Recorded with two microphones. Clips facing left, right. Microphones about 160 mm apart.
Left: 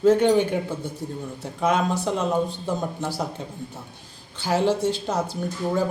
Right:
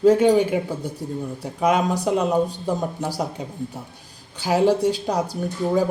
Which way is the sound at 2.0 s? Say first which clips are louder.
Right 3 dB; 15° right (ahead or behind).